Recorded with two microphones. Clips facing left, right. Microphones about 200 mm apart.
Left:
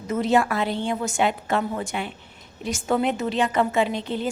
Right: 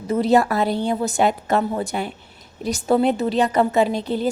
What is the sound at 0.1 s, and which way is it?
A woman's voice, 35° right (ahead or behind).